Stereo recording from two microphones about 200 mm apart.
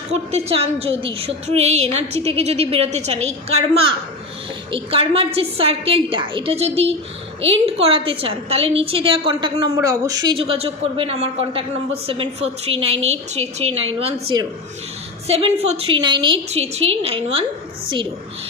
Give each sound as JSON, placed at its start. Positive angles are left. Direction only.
{"t": 0.1, "sound": "a woman's voice", "side_deg": -30}